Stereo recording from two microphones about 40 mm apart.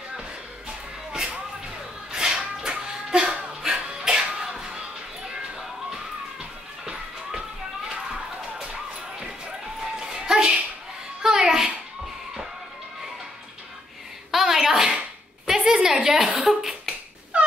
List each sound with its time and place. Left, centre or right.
2.1 s dog: centre
9.9 s music: centre
14.3 s a sound: centre